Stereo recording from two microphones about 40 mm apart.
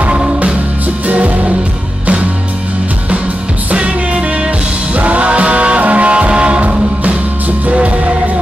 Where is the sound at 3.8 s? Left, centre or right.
Right.